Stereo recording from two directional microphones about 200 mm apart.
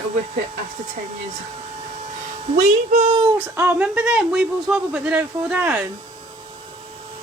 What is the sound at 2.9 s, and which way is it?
Speech, 30° right (ahead or behind).